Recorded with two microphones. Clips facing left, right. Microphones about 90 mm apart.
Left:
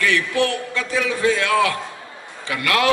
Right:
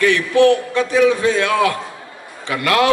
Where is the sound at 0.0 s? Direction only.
25° right (ahead or behind).